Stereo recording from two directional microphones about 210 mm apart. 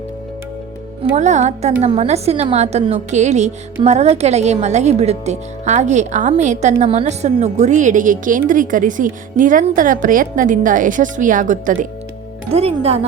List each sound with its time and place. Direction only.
1.1 s a woman's voice: 35° right (ahead or behind)